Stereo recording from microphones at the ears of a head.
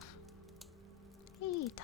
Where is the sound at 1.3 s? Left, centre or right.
Left.